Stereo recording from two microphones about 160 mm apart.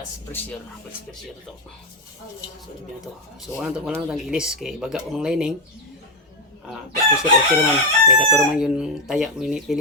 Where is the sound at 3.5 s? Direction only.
5° right (ahead or behind).